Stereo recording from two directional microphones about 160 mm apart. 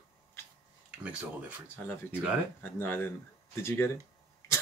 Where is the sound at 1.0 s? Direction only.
10° right (ahead or behind).